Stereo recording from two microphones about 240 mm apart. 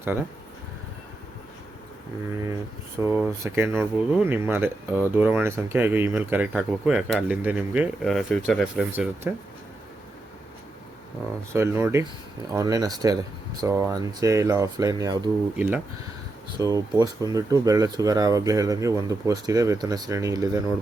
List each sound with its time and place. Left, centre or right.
3.0 s speech: centre
11.5 s speech: centre